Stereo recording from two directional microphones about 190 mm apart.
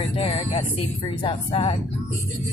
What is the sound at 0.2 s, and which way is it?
Speech, 35° left (ahead or behind).